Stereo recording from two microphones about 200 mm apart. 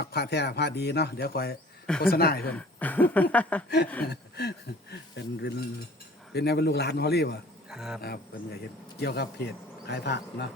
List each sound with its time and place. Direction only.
0.0 s speech: 55° left (ahead or behind)
2.5 s speech: 5° left (ahead or behind)
4.0 s speech: 55° left (ahead or behind)
7.7 s a sound: 5° right (ahead or behind)
8.0 s speech: 50° left (ahead or behind)